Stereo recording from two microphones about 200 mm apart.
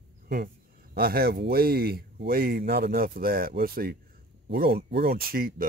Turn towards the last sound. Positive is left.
turn(degrees=-50)  # may be behind; listen again after turning